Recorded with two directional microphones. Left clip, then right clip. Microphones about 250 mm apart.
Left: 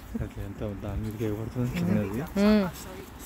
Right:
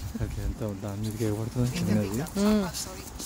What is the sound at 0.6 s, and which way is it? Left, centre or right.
Speech, right.